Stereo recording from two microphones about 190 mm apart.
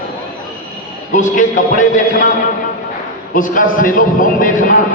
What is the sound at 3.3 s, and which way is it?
A man's voice, 45° left (ahead or behind).